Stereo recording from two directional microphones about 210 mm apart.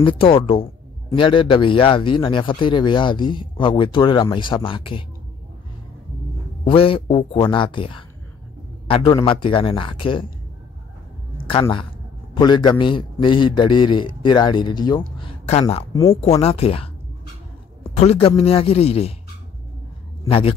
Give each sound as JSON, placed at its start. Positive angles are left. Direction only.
{"t": 0.0, "sound": "speech", "side_deg": 25}
{"t": 6.6, "sound": "speech", "side_deg": 25}
{"t": 11.3, "sound": "a sound", "side_deg": 25}
{"t": 11.6, "sound": "speech", "side_deg": 25}
{"t": 16.2, "sound": "speech", "side_deg": 30}
{"t": 17.9, "sound": "speech", "side_deg": 30}
{"t": 20.2, "sound": "speech", "side_deg": 25}